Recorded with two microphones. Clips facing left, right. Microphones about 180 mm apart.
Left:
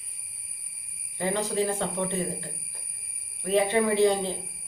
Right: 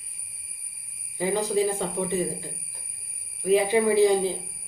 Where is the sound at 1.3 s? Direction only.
10° right (ahead or behind).